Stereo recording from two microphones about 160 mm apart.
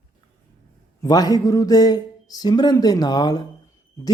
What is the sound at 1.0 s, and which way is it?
A man's voice, 25° left (ahead or behind).